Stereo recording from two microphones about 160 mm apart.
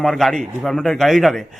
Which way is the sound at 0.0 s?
Centre (ahead or behind).